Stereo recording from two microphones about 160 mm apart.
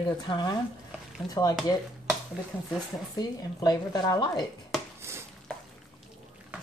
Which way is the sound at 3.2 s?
25° left (ahead or behind).